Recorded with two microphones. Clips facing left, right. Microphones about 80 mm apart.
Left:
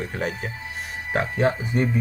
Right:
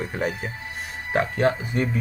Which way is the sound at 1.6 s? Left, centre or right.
Centre.